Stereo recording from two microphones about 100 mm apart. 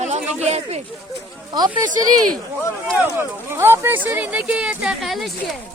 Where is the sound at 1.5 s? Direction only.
45° right (ahead or behind).